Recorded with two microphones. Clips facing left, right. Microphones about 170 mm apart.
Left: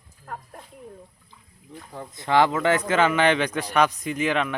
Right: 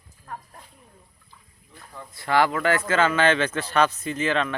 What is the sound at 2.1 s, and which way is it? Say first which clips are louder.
Speech: left 1 dB; 20° left (ahead or behind).